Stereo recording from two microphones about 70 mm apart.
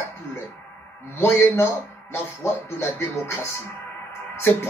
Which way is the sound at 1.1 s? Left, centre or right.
Left.